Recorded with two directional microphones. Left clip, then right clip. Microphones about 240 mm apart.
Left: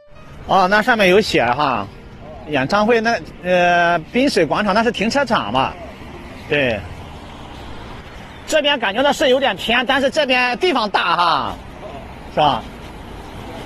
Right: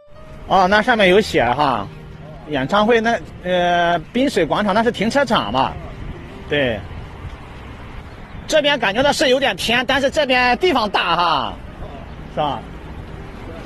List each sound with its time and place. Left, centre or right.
0.5 s speech: centre
8.5 s speech: centre
10.1 s speech: centre